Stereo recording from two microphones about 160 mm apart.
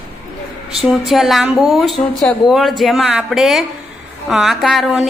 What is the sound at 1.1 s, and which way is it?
Speech, centre (ahead or behind).